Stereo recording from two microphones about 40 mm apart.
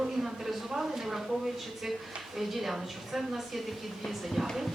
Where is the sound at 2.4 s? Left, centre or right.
Centre.